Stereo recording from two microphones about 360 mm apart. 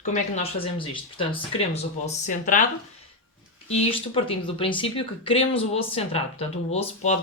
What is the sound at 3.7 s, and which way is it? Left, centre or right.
Speech, centre.